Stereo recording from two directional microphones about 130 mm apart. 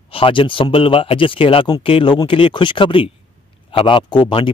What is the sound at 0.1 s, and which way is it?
A man's voice, 45° left (ahead or behind).